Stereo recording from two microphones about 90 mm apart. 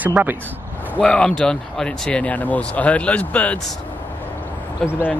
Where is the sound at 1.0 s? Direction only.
10° left (ahead or behind).